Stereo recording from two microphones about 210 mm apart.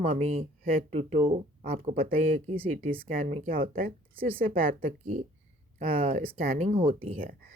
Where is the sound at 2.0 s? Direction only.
40° right (ahead or behind).